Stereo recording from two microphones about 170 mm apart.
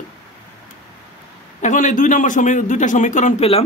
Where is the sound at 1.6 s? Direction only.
45° left (ahead or behind).